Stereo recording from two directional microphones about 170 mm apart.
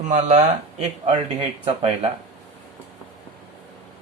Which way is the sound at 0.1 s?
45° right (ahead or behind).